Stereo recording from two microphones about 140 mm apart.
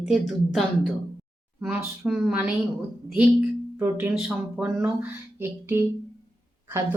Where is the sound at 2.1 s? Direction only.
5° right (ahead or behind).